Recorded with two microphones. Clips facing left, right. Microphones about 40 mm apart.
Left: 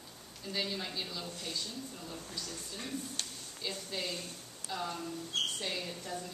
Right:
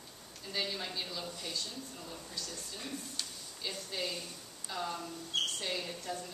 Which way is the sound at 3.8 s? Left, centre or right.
Centre.